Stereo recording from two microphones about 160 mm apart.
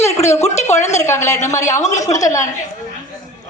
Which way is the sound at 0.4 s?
45° left (ahead or behind).